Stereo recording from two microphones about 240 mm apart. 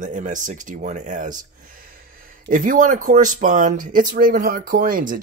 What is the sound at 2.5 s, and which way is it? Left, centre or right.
Speech, right.